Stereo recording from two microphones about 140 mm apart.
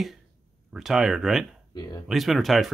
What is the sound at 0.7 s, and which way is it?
Speech, centre (ahead or behind).